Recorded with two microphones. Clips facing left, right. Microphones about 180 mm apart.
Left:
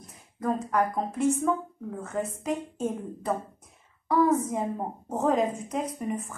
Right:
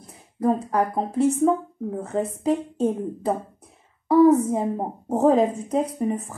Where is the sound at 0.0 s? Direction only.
35° right (ahead or behind).